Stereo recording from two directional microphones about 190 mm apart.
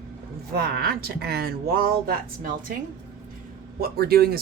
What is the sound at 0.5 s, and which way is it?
A woman's voice, 55° right (ahead or behind).